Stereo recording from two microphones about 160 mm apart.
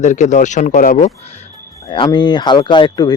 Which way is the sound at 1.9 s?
30° left (ahead or behind).